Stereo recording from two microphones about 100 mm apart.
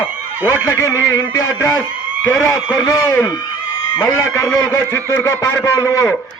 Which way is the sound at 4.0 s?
25° left (ahead or behind).